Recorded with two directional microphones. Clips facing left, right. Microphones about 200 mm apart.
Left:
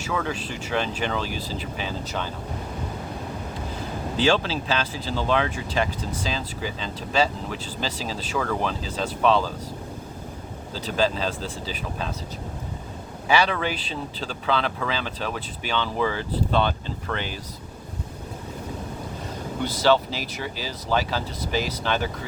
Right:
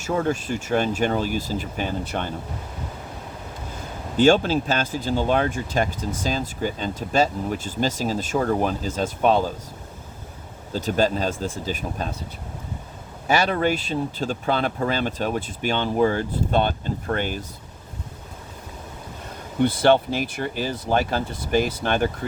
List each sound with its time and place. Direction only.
0.0 s speech: 45° right (ahead or behind)
4.2 s speech: 50° right (ahead or behind)
10.8 s speech: 45° right (ahead or behind)
13.2 s speech: 45° right (ahead or behind)
19.6 s speech: 55° right (ahead or behind)